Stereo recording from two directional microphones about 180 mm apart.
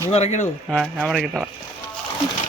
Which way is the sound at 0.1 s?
40° left (ahead or behind).